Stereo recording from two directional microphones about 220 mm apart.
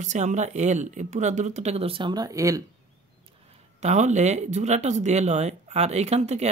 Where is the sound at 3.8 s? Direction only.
30° right (ahead or behind).